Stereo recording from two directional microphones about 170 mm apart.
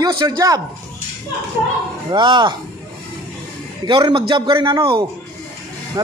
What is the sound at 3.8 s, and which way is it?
A man's voice, 30° right (ahead or behind).